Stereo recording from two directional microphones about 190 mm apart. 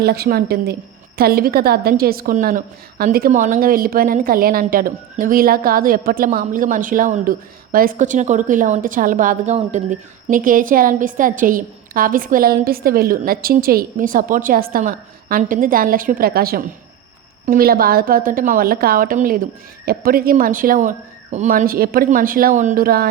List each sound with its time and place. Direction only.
0.0 s a woman's voice: 55° right (ahead or behind)